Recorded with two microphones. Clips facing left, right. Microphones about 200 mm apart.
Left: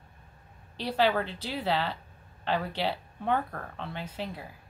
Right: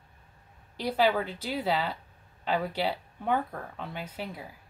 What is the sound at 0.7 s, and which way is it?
A woman's voice, 10° right (ahead or behind).